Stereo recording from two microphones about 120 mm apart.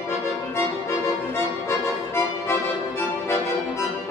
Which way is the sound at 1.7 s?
20° left (ahead or behind).